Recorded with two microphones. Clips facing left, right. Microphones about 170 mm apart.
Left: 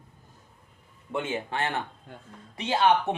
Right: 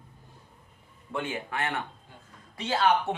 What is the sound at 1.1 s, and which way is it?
Speech, 25° left (ahead or behind).